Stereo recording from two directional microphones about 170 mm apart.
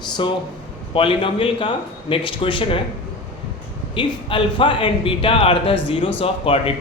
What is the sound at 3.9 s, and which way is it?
Speech, 30° left (ahead or behind).